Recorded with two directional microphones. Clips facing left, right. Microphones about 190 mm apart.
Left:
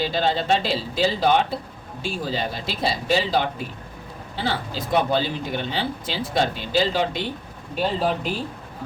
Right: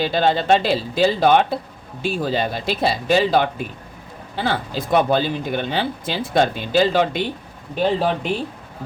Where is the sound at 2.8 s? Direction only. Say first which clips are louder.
Right 4 dB; 55° right (ahead or behind).